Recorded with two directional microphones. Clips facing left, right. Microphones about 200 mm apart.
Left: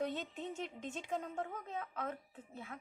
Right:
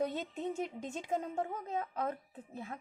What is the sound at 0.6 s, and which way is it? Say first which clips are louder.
A woman's voice: right 4 dB; 40° right (ahead or behind).